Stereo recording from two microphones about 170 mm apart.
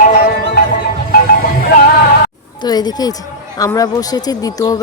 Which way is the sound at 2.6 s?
25° left (ahead or behind).